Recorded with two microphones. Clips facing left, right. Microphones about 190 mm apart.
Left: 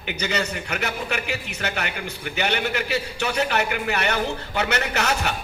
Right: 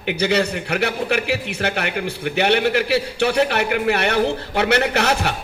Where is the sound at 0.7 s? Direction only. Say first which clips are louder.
Right 8 dB; 70° right (ahead or behind).